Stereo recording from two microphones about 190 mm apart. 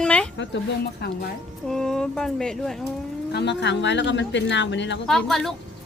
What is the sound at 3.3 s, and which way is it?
Speech, 60° left (ahead or behind).